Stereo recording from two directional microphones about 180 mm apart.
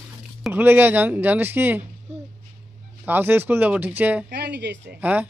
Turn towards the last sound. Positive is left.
turn(degrees=-10)  # may be behind; listen again after turning